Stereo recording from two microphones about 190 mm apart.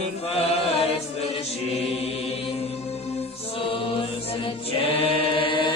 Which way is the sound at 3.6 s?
30° left (ahead or behind).